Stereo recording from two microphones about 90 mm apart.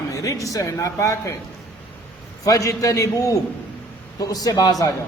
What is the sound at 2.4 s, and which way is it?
A man's voice, 40° left (ahead or behind).